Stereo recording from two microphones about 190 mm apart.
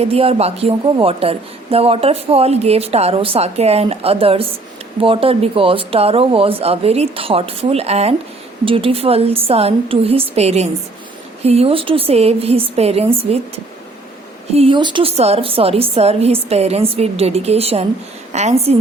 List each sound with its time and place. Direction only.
0.0 s a woman's voice: 30° right (ahead or behind)
14.5 s a woman's voice: 30° right (ahead or behind)